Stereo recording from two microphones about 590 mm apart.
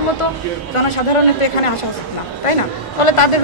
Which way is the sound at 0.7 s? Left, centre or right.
Left.